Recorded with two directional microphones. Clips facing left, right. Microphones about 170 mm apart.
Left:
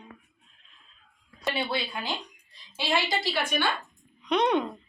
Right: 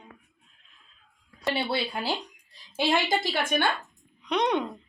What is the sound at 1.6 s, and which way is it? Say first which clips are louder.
Speech: right 2 dB; 35° right (ahead or behind).